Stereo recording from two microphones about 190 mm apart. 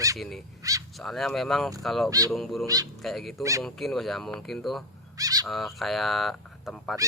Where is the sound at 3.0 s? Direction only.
Centre (ahead or behind).